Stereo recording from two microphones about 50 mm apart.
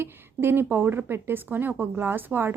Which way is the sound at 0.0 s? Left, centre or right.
Right.